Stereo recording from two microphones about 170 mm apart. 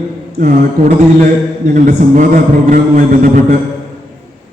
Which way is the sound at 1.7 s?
50° right (ahead or behind).